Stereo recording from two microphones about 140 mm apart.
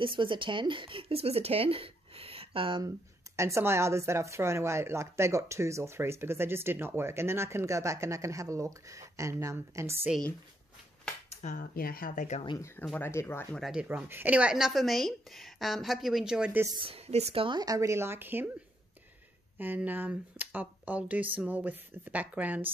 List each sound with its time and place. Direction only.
0.0 s speech: 35° right (ahead or behind)
3.3 s speech: 20° right (ahead or behind)
11.5 s speech: 90° left
12.4 s speech: 20° left (ahead or behind)
13.6 s speech: 5° right (ahead or behind)
16.8 s speech: 45° right (ahead or behind)
17.6 s speech: 25° right (ahead or behind)
19.6 s speech: 15° right (ahead or behind)